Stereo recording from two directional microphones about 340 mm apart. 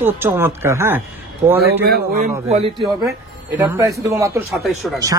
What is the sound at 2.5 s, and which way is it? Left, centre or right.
Speech, centre.